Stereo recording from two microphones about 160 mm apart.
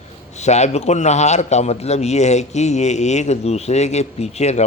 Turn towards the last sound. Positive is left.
turn(degrees=45)  # may be behind; listen again after turning